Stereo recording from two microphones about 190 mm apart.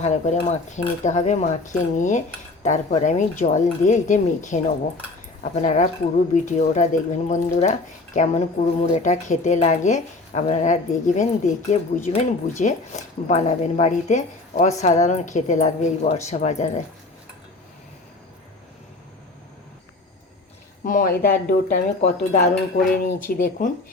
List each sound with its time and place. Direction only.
0.0 s speech: 35° left (ahead or behind)
20.8 s speech: 45° left (ahead or behind)